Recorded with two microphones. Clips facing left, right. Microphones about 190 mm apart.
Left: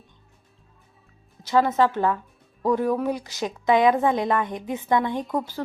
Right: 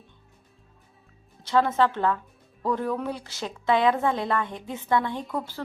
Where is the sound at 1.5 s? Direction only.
10° left (ahead or behind).